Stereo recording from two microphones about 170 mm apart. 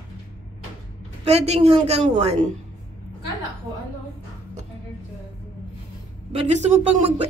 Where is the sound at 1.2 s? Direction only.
40° right (ahead or behind).